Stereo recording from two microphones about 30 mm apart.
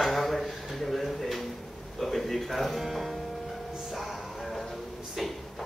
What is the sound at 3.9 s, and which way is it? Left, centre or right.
Music, centre.